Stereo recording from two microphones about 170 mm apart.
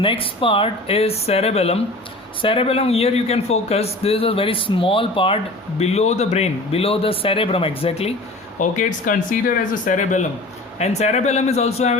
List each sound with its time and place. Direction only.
0.0 s a man's voice: 30° left (ahead or behind)
8.5 s a man's voice: 45° left (ahead or behind)